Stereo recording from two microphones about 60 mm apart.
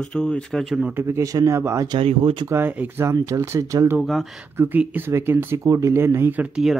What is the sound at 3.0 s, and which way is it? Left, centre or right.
Speech, right.